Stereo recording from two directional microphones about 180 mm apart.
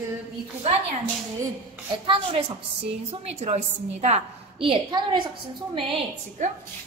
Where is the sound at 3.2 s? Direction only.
40° right (ahead or behind).